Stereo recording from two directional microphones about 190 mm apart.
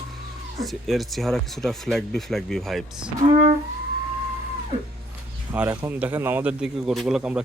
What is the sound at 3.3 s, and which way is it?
Speech, 40° right (ahead or behind).